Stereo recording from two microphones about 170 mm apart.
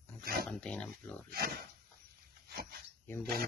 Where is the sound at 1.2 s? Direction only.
65° right (ahead or behind).